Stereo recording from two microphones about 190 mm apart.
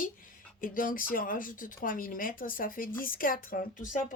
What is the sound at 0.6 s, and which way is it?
Speech, 45° left (ahead or behind).